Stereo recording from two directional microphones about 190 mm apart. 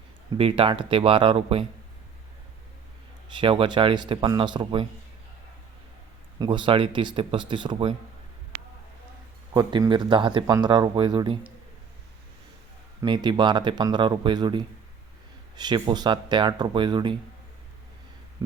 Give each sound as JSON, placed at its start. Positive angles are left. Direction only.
{"t": 0.3, "sound": "speech", "side_deg": -30}
{"t": 3.3, "sound": "speech", "side_deg": -25}
{"t": 6.4, "sound": "speech", "side_deg": -25}
{"t": 9.5, "sound": "speech", "side_deg": -20}
{"t": 13.0, "sound": "speech", "side_deg": -25}